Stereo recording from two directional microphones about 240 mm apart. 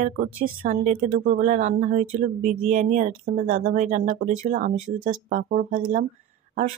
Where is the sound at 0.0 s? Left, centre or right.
Right.